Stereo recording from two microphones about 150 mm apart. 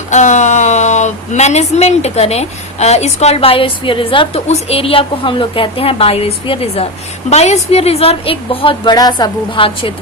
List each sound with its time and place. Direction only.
0.1 s a woman's voice: 55° left (ahead or behind); by 9.9 s 35° left (ahead or behind)